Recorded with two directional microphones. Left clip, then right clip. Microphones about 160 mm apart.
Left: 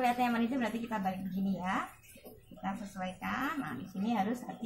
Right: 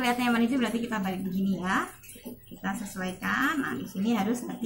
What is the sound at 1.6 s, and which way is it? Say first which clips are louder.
A woman's voice: right 7 dB; 15° left (ahead or behind).